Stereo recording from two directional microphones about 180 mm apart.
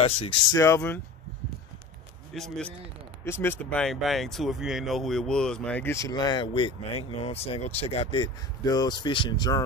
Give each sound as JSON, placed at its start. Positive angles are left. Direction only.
{"t": 0.0, "sound": "speech", "side_deg": 30}
{"t": 0.6, "sound": "speech", "side_deg": 15}
{"t": 2.3, "sound": "a man's voice", "side_deg": 0}